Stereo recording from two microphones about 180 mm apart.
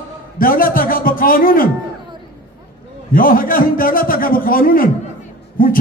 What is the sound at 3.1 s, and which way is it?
A man's voice, 50° left (ahead or behind).